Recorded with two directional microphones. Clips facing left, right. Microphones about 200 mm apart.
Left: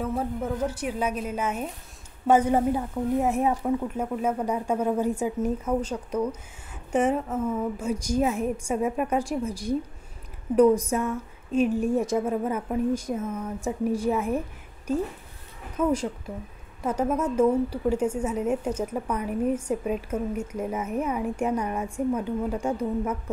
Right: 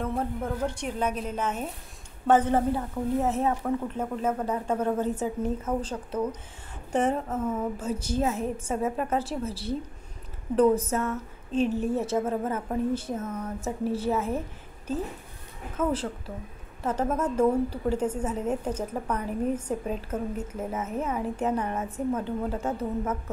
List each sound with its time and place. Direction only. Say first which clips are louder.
0.0 s a woman's voice: left 1 dB; 5° left (ahead or behind)
15.8 s a woman's voice: left 3 dB; 15° left (ahead or behind)